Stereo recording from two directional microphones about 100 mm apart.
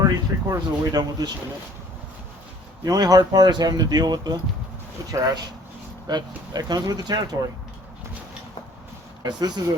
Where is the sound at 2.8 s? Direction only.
40° right (ahead or behind).